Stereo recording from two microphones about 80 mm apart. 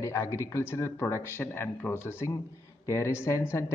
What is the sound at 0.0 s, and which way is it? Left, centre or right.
Speech, left.